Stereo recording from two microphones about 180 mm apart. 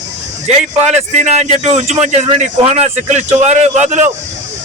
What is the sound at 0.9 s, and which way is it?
A man's voice, 40° right (ahead or behind).